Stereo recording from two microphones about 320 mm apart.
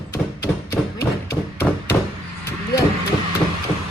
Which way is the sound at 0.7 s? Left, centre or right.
Left.